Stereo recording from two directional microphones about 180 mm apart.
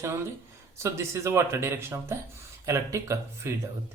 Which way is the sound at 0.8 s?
15° right (ahead or behind).